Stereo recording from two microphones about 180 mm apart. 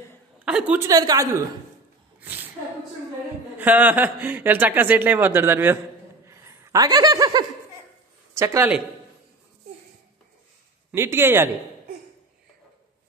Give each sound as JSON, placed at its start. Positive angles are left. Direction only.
{"t": 0.5, "sound": "a man's voice", "side_deg": -5}
{"t": 2.1, "sound": "a sound", "side_deg": -10}
{"t": 3.5, "sound": "a man's voice", "side_deg": -10}
{"t": 6.2, "sound": "laughter", "side_deg": -15}
{"t": 8.4, "sound": "a man's voice", "side_deg": -10}
{"t": 10.9, "sound": "a man's voice", "side_deg": -15}